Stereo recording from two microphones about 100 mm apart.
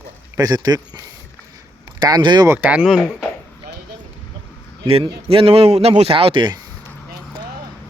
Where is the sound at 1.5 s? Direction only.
45° right (ahead or behind).